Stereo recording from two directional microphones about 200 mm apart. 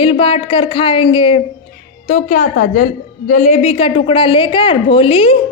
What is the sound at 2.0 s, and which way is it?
A woman's voice, 40° left (ahead or behind).